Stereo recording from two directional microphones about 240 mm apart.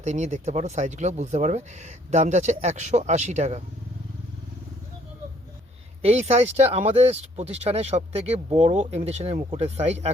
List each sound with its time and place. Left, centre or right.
0.0 s speech: right
6.0 s speech: right